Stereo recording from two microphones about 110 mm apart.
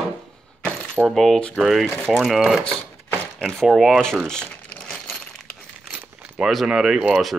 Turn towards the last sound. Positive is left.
turn(degrees=-10)  # may be behind; listen again after turning